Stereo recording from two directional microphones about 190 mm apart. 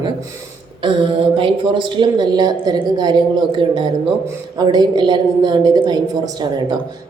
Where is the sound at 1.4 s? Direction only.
25° right (ahead or behind).